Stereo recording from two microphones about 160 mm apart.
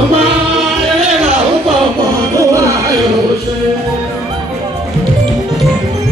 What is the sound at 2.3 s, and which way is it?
Music, 20° right (ahead or behind).